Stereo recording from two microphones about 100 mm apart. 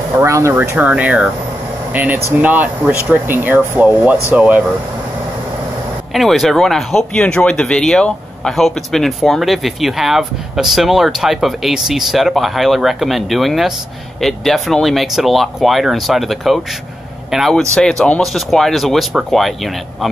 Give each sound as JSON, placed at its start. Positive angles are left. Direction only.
{"t": 0.2, "sound": "speech", "side_deg": -30}
{"t": 0.7, "sound": "speech", "side_deg": -15}
{"t": 6.1, "sound": "speech", "side_deg": 0}